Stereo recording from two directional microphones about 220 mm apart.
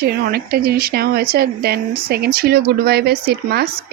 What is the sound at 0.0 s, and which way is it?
A woman's voice, 45° right (ahead or behind).